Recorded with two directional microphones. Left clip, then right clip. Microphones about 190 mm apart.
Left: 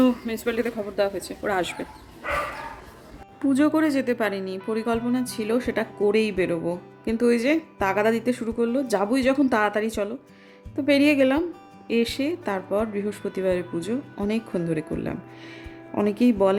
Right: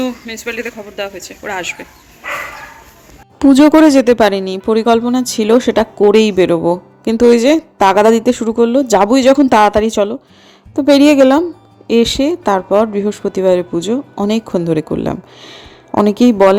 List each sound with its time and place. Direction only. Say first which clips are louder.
0.0 s speech: right 2 dB; 15° left (ahead or behind)
3.3 s speech: right 14 dB; 40° right (ahead or behind)